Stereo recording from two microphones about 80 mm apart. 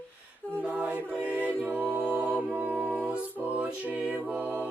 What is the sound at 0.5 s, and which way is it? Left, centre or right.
A capella, centre.